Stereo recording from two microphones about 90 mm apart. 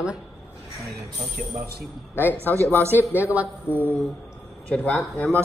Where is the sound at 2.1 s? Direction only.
20° left (ahead or behind).